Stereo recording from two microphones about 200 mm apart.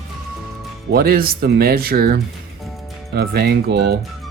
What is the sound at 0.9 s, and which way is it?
Speech, 50° right (ahead or behind).